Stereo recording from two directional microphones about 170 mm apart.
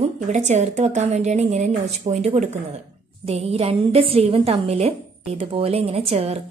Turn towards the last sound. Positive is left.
turn(degrees=-35)  # may be behind; listen again after turning